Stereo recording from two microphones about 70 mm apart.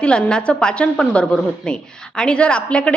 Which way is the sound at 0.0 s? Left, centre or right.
Centre.